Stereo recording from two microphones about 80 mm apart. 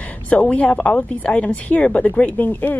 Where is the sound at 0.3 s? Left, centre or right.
Centre.